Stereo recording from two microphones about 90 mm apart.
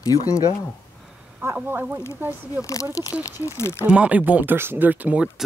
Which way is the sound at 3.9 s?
15° right (ahead or behind).